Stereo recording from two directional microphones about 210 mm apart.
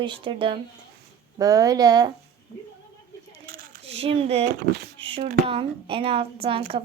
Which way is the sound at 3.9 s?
25° right (ahead or behind).